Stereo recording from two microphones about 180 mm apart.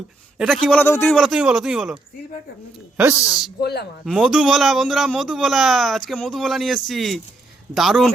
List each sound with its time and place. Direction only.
0.3 s speech: centre (ahead or behind)
3.6 s speech: 65° left (ahead or behind)
4.0 s speech: centre (ahead or behind)